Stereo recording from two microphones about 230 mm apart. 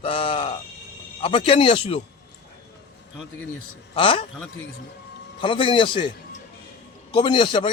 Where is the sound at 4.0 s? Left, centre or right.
Left.